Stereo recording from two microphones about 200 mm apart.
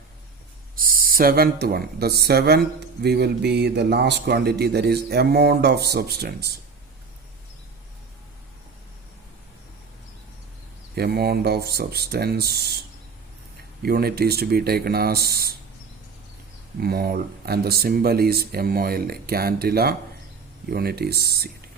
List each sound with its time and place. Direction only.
0.8 s speech: 45° right (ahead or behind)
10.9 s speech: 50° right (ahead or behind)
13.8 s speech: 50° right (ahead or behind)
16.8 s speech: 50° right (ahead or behind)